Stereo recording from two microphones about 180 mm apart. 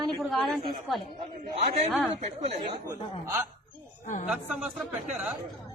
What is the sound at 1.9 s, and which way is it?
Speech, centre (ahead or behind).